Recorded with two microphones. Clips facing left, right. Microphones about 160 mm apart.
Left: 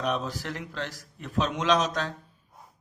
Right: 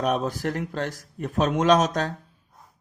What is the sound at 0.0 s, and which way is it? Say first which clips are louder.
Speech: right 5 dB; 50° right (ahead or behind).